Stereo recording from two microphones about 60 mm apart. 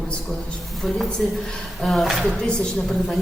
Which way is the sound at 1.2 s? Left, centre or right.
Centre.